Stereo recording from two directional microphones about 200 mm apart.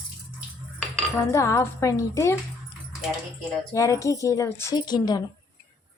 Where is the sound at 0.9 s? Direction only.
15° left (ahead or behind).